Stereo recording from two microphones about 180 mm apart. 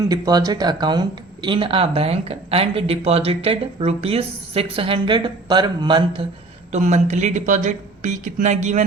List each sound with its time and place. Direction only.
0.1 s speech: 20° right (ahead or behind)
6.7 s speech: 40° right (ahead or behind)